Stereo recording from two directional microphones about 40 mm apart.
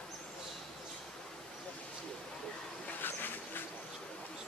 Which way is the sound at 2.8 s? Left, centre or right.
Left.